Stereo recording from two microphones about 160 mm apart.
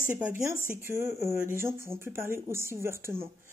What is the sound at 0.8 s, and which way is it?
Speech, 15° right (ahead or behind).